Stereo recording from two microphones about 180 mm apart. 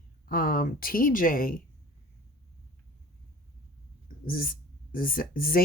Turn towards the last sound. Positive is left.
turn(degrees=50)  # may be behind; listen again after turning